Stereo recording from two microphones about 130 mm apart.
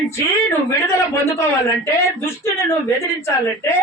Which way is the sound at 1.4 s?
20° left (ahead or behind).